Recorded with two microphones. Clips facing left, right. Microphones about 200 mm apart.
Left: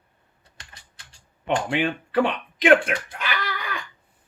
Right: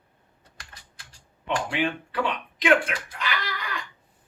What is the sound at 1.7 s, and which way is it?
Speech, 55° left (ahead or behind).